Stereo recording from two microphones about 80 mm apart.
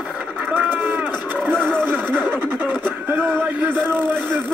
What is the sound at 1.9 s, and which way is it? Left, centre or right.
Snicker, right.